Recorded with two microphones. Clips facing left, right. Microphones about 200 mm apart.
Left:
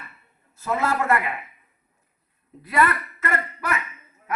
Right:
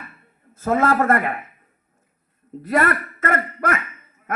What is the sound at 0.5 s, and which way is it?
Speech, 50° right (ahead or behind).